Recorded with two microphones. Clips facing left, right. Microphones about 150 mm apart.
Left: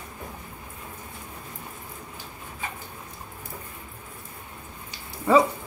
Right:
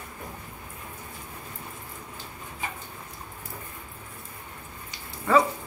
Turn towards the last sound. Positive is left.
turn(degrees=15)  # may be behind; listen again after turning